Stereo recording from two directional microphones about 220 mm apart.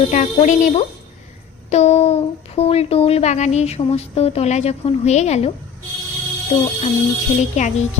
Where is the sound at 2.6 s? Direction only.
25° left (ahead or behind).